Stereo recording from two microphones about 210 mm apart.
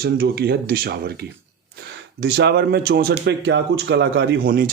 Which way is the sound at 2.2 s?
55° right (ahead or behind).